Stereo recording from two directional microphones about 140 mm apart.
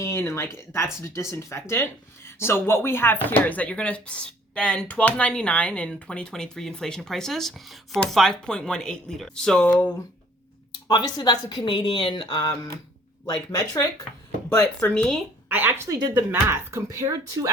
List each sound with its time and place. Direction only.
0.0 s speech: 20° left (ahead or behind)
10.8 s speech: 30° left (ahead or behind)
13.2 s speech: 25° left (ahead or behind)
14.8 s speech: 5° left (ahead or behind)
15.4 s speech: 15° right (ahead or behind)